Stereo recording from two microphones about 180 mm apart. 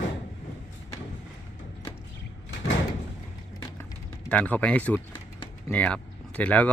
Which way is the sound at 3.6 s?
20° left (ahead or behind).